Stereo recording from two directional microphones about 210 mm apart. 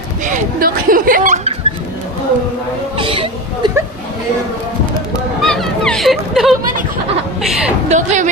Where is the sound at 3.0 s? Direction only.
25° right (ahead or behind).